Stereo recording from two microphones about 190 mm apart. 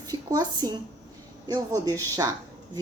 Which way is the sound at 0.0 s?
20° right (ahead or behind).